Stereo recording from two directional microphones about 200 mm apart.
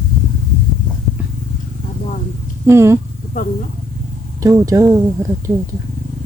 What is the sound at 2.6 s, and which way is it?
Speech, 15° right (ahead or behind).